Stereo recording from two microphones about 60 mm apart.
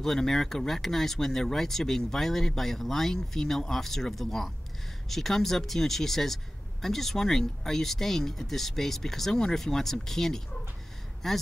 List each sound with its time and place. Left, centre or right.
0.0 s speech: centre